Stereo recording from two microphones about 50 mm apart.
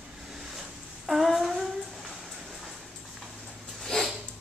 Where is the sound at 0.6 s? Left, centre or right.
Centre.